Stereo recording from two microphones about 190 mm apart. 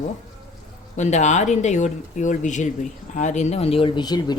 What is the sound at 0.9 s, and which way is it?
Speech, 40° left (ahead or behind).